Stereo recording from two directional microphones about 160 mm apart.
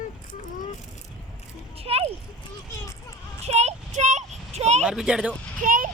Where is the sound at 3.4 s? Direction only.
40° right (ahead or behind).